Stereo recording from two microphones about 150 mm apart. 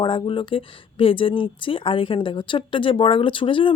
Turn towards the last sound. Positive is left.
turn(degrees=35)  # may be behind; listen again after turning